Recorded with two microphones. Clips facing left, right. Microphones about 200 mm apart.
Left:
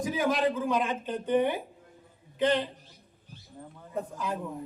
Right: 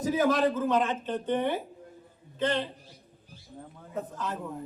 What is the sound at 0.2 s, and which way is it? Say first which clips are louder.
A man's voice: right 1 dB; 15° left (ahead or behind).